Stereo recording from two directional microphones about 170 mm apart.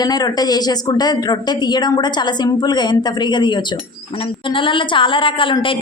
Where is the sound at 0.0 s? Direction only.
25° left (ahead or behind).